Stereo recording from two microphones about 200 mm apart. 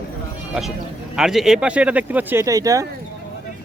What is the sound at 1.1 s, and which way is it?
Speech, centre (ahead or behind).